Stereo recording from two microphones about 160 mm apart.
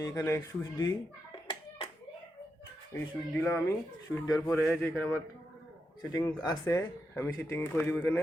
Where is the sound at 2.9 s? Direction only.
15° left (ahead or behind).